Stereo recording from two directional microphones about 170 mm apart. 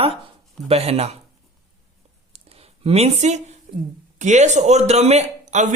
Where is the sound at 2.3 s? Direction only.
35° right (ahead or behind).